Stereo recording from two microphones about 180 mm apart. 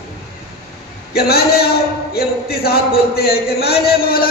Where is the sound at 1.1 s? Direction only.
60° left (ahead or behind).